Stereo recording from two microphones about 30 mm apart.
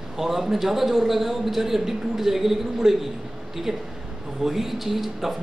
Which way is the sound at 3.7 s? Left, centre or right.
Right.